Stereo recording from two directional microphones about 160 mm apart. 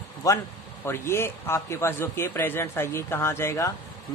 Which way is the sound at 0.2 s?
20° left (ahead or behind).